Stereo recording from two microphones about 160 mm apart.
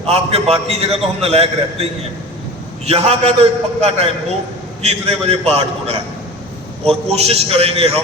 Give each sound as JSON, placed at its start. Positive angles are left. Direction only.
{"t": 0.0, "sound": "a man's voice", "side_deg": -40}